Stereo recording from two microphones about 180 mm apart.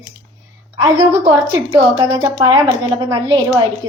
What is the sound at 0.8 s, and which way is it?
A woman's voice, 25° right (ahead or behind).